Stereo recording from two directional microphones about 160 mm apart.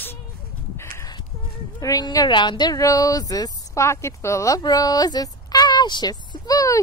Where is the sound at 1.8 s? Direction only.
20° left (ahead or behind).